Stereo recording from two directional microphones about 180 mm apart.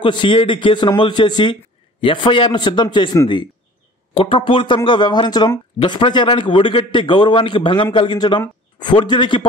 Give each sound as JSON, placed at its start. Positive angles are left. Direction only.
{"t": 0.0, "sound": "a man's voice", "side_deg": 25}